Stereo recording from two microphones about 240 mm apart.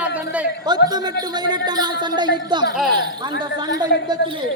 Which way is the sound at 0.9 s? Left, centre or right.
Centre.